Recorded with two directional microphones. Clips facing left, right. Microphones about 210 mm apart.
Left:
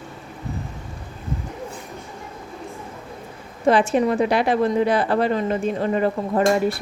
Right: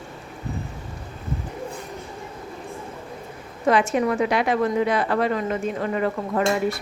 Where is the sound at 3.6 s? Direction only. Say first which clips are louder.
Left 2 dB; 30° left (ahead or behind).